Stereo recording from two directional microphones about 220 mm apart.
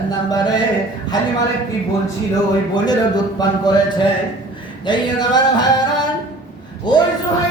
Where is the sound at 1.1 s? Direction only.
20° left (ahead or behind).